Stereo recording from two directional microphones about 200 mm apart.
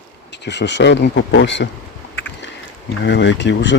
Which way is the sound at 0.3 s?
60° left (ahead or behind).